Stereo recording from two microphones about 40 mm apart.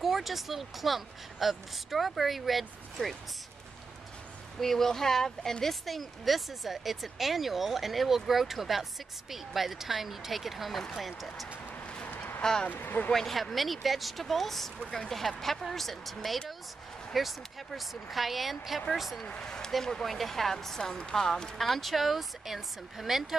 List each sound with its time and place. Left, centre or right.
0.0 s speech: centre
4.6 s speech: centre
12.4 s speech: centre
12.6 s speech: left
13.1 s speech: centre
19.4 s speech: centre
21.5 s speech: centre